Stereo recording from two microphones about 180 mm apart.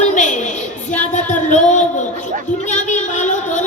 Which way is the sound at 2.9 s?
45° left (ahead or behind).